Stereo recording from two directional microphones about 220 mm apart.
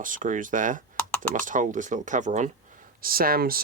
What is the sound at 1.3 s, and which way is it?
Speech, 35° right (ahead or behind).